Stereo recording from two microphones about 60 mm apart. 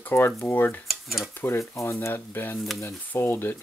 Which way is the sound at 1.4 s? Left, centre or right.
Left.